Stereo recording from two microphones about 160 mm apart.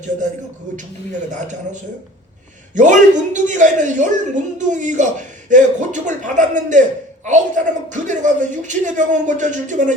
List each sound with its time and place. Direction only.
1.3 s speech: 50° right (ahead or behind)